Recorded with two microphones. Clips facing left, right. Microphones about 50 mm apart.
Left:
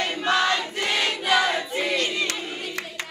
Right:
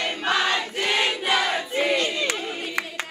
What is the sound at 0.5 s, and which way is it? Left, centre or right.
Choir, right.